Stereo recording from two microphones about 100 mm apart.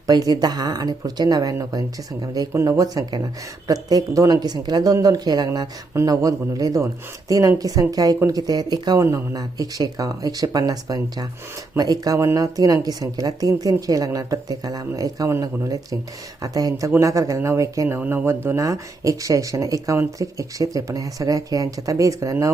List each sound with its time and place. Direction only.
0.1 s speech: 40° right (ahead or behind)
5.9 s speech: 30° right (ahead or behind)
9.0 s speech: 30° right (ahead or behind)
9.4 s speech: 40° right (ahead or behind); by 18.3 s 20° right (ahead or behind)
18.4 s speech: 30° right (ahead or behind)